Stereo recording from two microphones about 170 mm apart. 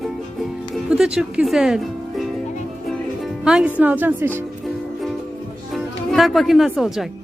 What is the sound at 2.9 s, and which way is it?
Music, centre (ahead or behind).